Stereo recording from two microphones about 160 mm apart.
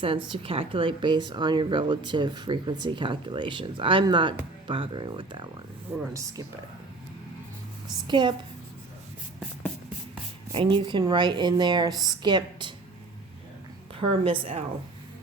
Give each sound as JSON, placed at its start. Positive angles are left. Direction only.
{"t": 0.0, "sound": "speech", "side_deg": -35}
{"t": 8.0, "sound": "speech", "side_deg": -30}
{"t": 10.5, "sound": "speech", "side_deg": -30}
{"t": 14.3, "sound": "speech", "side_deg": -35}